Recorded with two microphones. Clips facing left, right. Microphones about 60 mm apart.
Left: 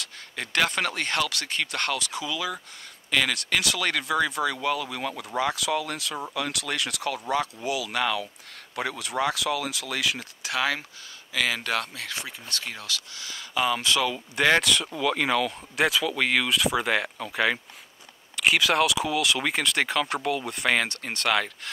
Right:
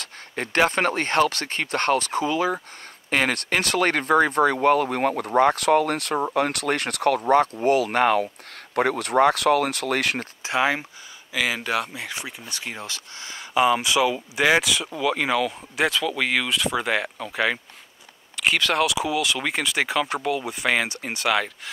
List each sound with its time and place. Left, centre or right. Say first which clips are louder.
0.0 s speech: right 5 dB; right
10.4 s speech: right 4 dB; right
11.3 s speech: right 2 dB; centre
12.8 s speech: even; right; by 21.5 s centre